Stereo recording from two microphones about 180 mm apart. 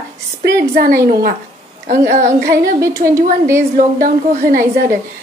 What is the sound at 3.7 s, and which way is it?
Speech, 50° right (ahead or behind).